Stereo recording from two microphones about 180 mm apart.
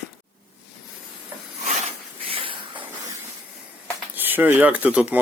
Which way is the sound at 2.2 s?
30° right (ahead or behind).